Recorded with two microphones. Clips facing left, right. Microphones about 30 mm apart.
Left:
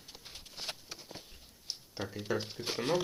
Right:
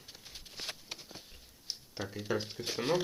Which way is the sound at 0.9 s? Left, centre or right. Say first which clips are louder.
Right 2 dB; centre.